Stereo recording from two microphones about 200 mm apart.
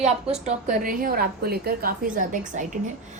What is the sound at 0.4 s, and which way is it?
A woman's voice, 40° right (ahead or behind).